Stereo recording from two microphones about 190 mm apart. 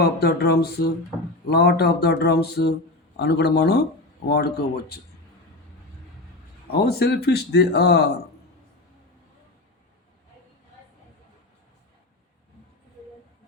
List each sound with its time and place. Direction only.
0.0 s speech: 55° left (ahead or behind)
6.7 s speech: 55° left (ahead or behind)